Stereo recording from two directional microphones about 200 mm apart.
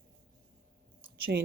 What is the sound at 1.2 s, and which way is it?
Speech, 55° right (ahead or behind).